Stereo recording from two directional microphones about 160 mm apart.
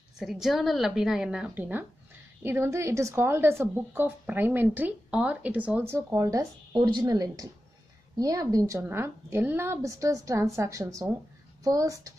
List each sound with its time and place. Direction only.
0.2 s a woman's voice: centre (ahead or behind); by 12.1 s 20° right (ahead or behind)